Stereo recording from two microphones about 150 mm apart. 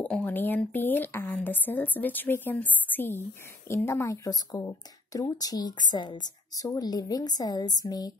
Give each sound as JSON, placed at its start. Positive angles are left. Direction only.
{"t": 0.0, "sound": "a woman's voice", "side_deg": 10}